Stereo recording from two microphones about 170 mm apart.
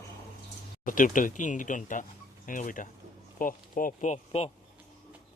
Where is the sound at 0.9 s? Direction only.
50° left (ahead or behind).